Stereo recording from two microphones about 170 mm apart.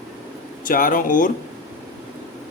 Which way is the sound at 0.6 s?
55° left (ahead or behind).